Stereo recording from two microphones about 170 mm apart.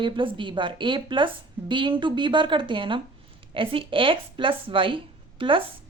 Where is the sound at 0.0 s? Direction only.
30° right (ahead or behind).